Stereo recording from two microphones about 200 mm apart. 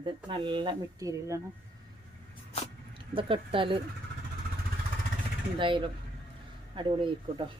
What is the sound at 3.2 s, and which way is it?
Speech, 25° right (ahead or behind).